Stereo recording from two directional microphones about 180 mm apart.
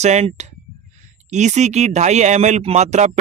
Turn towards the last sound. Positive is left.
turn(degrees=-40)  # may be behind; listen again after turning